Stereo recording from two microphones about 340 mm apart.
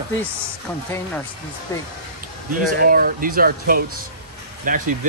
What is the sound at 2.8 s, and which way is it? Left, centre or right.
Speech, right.